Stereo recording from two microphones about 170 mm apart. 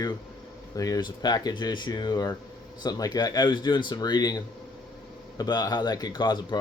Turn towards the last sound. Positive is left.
turn(degrees=25)  # may be behind; listen again after turning